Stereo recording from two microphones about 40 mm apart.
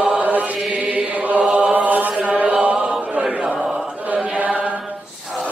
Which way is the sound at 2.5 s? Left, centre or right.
Right.